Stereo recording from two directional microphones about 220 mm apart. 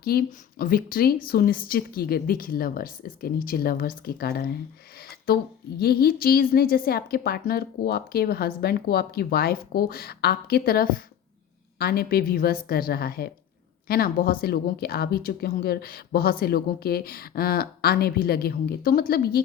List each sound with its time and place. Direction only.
0.0 s a woman's voice: 40° left (ahead or behind)